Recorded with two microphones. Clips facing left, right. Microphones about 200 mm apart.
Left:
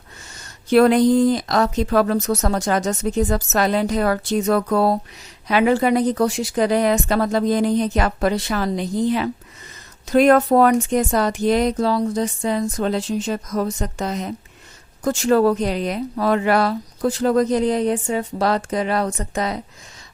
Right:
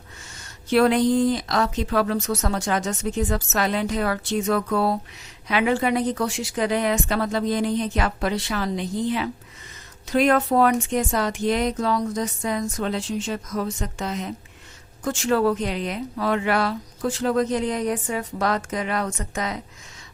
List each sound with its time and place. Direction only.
0.7 s speech: 40° left (ahead or behind)